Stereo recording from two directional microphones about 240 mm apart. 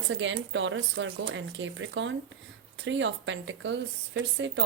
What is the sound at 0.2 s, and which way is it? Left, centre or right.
A woman's voice, right.